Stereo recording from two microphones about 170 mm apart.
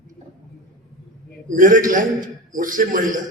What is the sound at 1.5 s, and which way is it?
A man's voice, 50° right (ahead or behind).